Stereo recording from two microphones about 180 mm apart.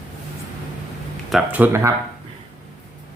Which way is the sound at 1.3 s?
5° right (ahead or behind).